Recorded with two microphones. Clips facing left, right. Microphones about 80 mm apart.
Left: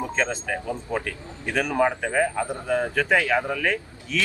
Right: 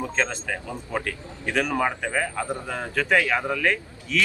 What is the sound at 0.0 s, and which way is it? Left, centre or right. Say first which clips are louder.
Speech: left 1 dB; centre.